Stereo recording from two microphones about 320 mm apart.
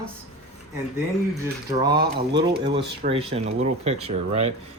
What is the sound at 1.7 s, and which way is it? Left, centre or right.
Speech, centre.